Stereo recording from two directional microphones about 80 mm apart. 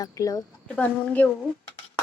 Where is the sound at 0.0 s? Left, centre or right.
Left.